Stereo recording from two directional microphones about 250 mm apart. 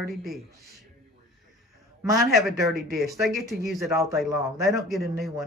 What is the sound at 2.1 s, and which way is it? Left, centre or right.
Speech, centre.